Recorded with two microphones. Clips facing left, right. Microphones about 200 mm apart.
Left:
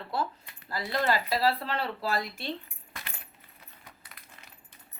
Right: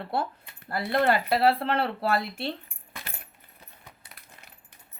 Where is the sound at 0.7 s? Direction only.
60° right (ahead or behind).